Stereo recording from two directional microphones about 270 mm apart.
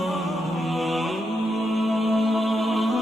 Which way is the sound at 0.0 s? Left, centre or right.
Centre.